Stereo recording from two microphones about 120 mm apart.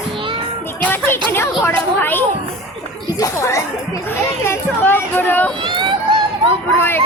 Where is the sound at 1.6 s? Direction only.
20° left (ahead or behind).